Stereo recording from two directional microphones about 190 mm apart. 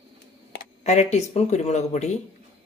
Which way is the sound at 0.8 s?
35° left (ahead or behind).